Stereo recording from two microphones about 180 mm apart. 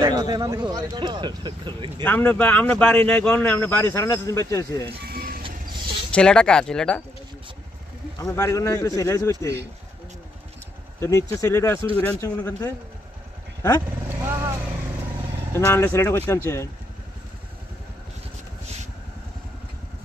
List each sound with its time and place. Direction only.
0.0 s speech: 20° right (ahead or behind)
2.0 s speech: 10° left (ahead or behind)
5.0 s vehicle: 55° right (ahead or behind)
5.4 s vehicle: 25° right (ahead or behind)
6.1 s speech: 5° left (ahead or behind)
8.2 s speech: 20° left (ahead or behind)
11.0 s speech: 15° left (ahead or behind)
15.5 s speech: 15° left (ahead or behind)